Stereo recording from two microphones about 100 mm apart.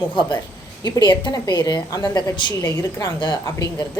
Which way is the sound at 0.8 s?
45° left (ahead or behind).